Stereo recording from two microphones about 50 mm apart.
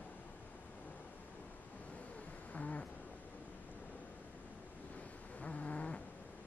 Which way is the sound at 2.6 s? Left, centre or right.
Left.